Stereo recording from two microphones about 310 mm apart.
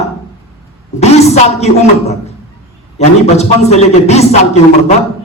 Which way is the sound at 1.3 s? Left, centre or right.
Left.